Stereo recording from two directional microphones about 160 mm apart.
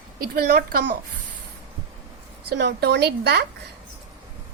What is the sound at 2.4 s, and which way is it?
Speech, 90° right.